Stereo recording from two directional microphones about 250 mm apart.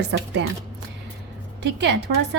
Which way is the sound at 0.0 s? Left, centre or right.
Right.